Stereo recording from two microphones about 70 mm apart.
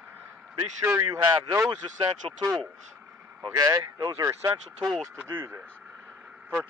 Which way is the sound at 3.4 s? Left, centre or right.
Right.